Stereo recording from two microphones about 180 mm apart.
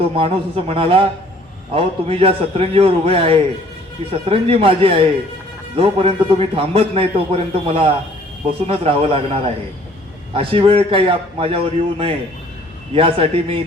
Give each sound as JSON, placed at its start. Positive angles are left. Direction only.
{"t": 0.2, "sound": "a man's voice", "side_deg": -30}